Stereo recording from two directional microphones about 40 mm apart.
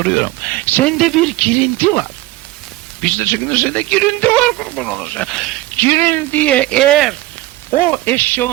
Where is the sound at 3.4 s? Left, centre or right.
Left.